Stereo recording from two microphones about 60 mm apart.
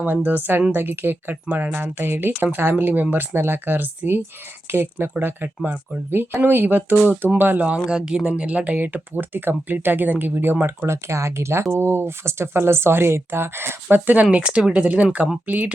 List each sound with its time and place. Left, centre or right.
0.0 s speech: right
10.8 s speech: right
13.9 s speech: right